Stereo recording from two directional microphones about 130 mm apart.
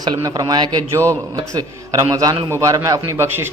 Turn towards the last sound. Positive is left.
turn(degrees=-20)  # may be behind; listen again after turning